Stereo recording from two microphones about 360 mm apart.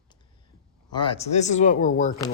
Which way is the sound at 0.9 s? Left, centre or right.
Centre.